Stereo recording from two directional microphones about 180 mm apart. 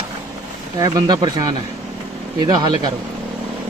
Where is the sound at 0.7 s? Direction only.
20° right (ahead or behind).